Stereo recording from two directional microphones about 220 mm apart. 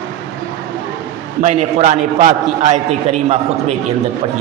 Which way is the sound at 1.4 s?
35° right (ahead or behind).